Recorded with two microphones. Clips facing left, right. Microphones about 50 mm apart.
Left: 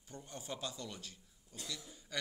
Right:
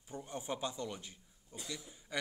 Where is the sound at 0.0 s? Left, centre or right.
Centre.